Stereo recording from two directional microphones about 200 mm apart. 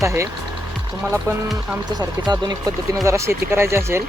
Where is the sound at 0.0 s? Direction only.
15° right (ahead or behind).